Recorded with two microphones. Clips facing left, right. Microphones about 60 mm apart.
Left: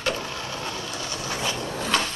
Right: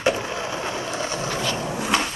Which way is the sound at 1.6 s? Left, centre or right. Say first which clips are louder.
Right 2 dB; centre.